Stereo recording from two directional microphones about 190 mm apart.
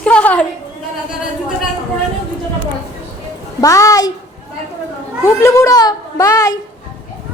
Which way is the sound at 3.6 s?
15° left (ahead or behind).